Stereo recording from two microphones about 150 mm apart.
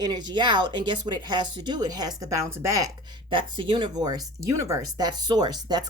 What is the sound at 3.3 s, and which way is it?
A woman's voice, 35° right (ahead or behind).